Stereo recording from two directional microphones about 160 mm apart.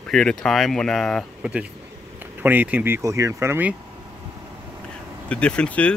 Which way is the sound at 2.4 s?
10° right (ahead or behind).